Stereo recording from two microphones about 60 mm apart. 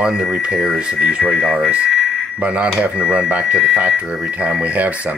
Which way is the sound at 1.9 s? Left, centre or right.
Centre.